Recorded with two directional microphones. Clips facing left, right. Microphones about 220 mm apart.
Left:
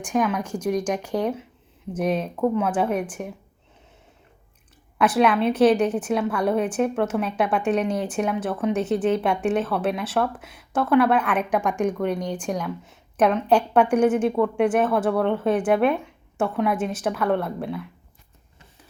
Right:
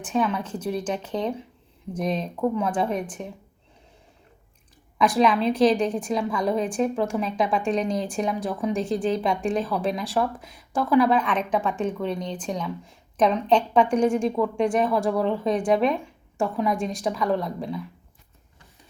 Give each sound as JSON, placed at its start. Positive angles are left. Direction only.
{"t": 0.0, "sound": "a woman's voice", "side_deg": 10}
{"t": 4.9, "sound": "a woman's voice", "side_deg": 5}